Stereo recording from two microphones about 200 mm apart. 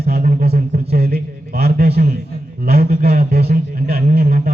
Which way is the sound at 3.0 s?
50° right (ahead or behind).